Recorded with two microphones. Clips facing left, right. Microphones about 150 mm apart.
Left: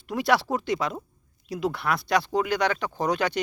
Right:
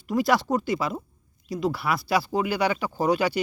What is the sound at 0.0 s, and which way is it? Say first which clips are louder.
Speech: right 1 dB; centre (ahead or behind).